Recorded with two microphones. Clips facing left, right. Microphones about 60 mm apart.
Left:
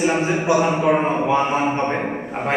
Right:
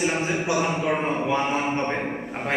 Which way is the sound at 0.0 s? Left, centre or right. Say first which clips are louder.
Left 5 dB; centre.